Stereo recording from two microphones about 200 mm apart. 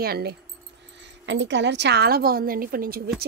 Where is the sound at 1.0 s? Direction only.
65° right (ahead or behind).